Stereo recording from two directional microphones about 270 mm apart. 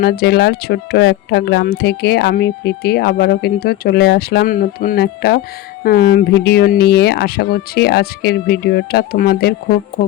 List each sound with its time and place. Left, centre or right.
0.0 s speech: left